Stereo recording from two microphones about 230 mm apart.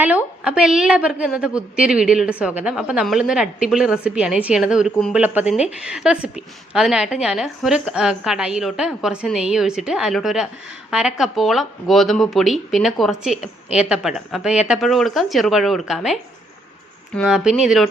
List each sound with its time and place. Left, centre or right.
0.4 s a woman's voice: centre